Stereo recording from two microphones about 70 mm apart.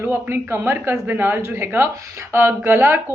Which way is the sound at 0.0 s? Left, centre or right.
Right.